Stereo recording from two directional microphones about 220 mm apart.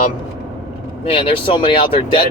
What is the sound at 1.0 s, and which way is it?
Speech, 25° left (ahead or behind).